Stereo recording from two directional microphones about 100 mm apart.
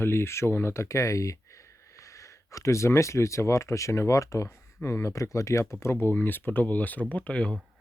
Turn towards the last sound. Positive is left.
turn(degrees=10)  # may be behind; listen again after turning